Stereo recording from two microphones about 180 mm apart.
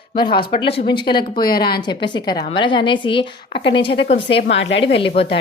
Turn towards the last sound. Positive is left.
turn(degrees=30)  # may be behind; listen again after turning